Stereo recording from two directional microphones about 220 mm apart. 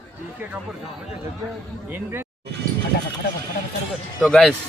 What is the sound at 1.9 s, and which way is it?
Speech, 10° right (ahead or behind).